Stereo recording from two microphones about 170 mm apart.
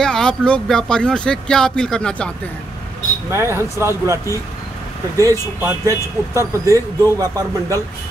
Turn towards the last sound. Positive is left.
turn(degrees=-20)  # may be behind; listen again after turning